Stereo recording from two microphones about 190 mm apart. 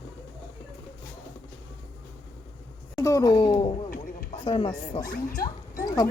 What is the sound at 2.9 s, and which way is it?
Speech, 15° left (ahead or behind).